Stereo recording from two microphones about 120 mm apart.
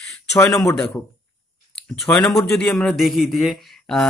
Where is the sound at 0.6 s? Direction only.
5° left (ahead or behind).